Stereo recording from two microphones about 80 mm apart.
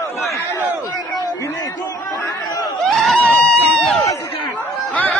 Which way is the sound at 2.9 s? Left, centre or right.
Centre.